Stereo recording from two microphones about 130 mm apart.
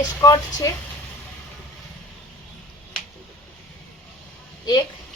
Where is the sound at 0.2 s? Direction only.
25° left (ahead or behind).